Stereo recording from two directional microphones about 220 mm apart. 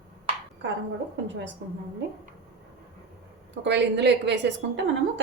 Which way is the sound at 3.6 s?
50° right (ahead or behind).